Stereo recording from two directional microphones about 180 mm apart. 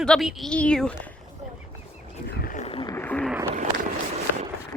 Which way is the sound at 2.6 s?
25° left (ahead or behind).